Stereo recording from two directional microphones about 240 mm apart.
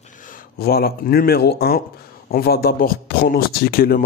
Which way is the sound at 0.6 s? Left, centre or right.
Left.